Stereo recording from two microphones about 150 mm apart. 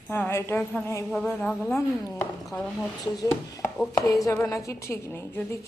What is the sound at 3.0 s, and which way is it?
A woman's voice, 25° left (ahead or behind).